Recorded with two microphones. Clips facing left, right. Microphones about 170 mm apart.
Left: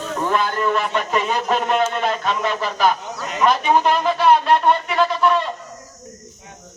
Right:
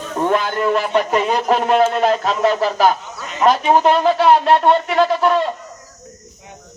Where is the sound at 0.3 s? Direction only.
45° right (ahead or behind).